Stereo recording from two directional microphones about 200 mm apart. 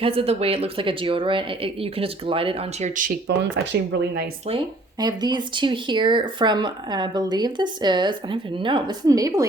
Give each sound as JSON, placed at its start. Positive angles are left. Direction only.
{"t": 0.0, "sound": "speech", "side_deg": -30}
{"t": 3.4, "sound": "speech", "side_deg": -60}
{"t": 4.4, "sound": "speech", "side_deg": -25}